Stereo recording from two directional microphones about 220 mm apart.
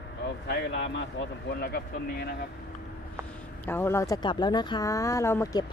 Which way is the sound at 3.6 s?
10° left (ahead or behind).